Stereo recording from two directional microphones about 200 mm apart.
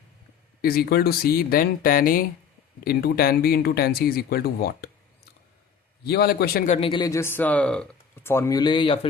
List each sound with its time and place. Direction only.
0.6 s speech: 50° left (ahead or behind)
6.1 s speech: 50° left (ahead or behind)
6.7 s speech: 25° left (ahead or behind)